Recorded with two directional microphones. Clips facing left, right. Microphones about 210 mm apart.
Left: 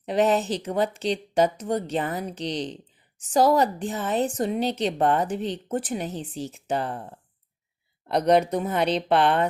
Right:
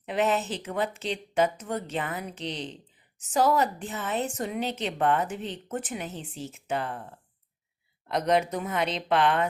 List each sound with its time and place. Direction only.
0.0 s a woman's voice: 35° left (ahead or behind)
8.0 s a woman's voice: 35° left (ahead or behind)